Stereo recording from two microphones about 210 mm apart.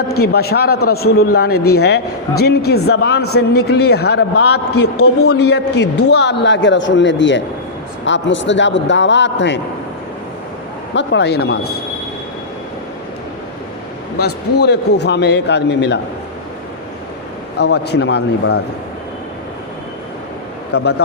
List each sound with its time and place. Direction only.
0.2 s a man's voice: 50° left (ahead or behind)
4.9 s a man's voice: 90° left
5.3 s a man's voice: 50° left (ahead or behind)
10.9 s a man's voice: 55° left (ahead or behind)
14.6 s a man's voice: 55° left (ahead or behind)
17.6 s a man's voice: 55° left (ahead or behind)
20.7 s a man's voice: 50° left (ahead or behind)